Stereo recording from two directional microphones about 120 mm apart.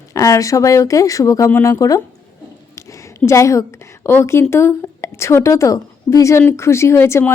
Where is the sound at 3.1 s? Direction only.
25° left (ahead or behind).